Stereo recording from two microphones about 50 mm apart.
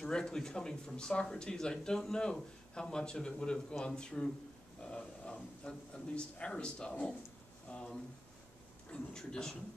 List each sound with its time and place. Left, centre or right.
0.0 s speech: centre
4.8 s a sound: centre
5.7 s a man's voice: centre